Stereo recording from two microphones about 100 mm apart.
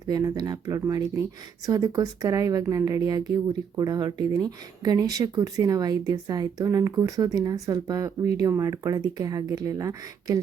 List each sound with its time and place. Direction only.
0.1 s speech: 40° right (ahead or behind)